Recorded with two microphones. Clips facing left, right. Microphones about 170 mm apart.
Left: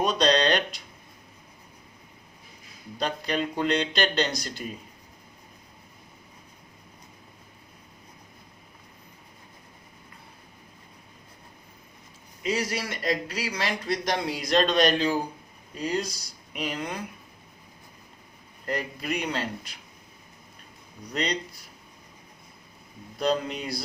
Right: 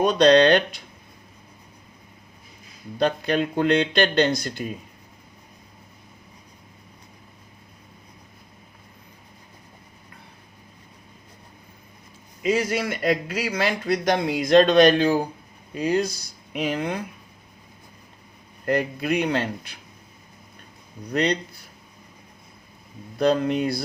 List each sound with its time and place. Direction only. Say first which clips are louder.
0.0 s speech: right 7 dB; 55° right (ahead or behind)
3.0 s speech: right 6 dB; 55° right (ahead or behind)
12.5 s speech: right 6 dB; 50° right (ahead or behind)
18.6 s speech: right 8 dB; 60° right (ahead or behind)
21.1 s speech: right 7 dB; 55° right (ahead or behind)
23.1 s speech: right 6 dB; 55° right (ahead or behind)